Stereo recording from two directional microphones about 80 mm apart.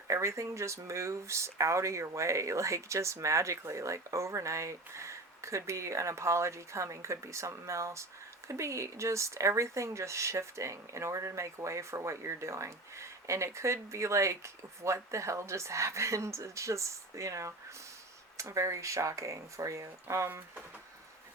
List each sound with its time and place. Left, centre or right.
0.1 s speech: right